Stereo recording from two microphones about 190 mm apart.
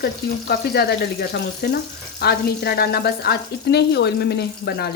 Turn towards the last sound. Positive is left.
turn(degrees=60)  # may be behind; listen again after turning